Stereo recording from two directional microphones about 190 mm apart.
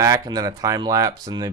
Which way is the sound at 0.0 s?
20° right (ahead or behind).